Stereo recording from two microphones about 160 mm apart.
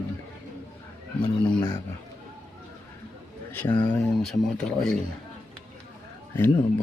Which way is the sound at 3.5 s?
10° left (ahead or behind).